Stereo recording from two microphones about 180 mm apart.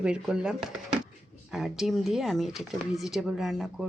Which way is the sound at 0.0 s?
5° right (ahead or behind).